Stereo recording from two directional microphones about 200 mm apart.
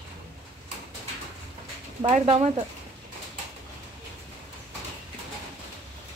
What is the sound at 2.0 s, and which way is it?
Speech, 30° right (ahead or behind).